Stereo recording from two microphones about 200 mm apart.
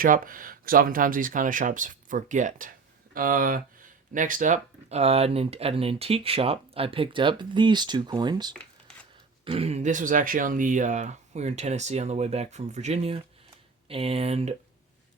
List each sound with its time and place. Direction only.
0.0 s speech: 45° right (ahead or behind)